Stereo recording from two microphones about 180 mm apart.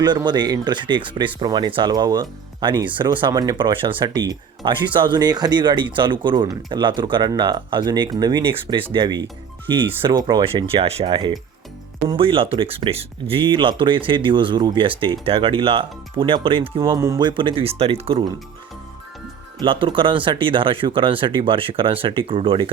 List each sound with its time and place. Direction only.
0.0 s speech: 25° right (ahead or behind)
19.5 s speech: 30° right (ahead or behind)